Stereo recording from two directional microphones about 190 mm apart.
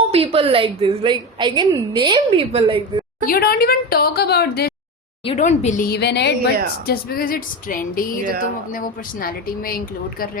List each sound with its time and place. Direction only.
0.1 s a woman's voice: 30° right (ahead or behind)
3.2 s speech: 50° left (ahead or behind)
5.2 s speech: 35° left (ahead or behind); by 6.5 s 60° left (ahead or behind)
6.8 s speech: 50° left (ahead or behind)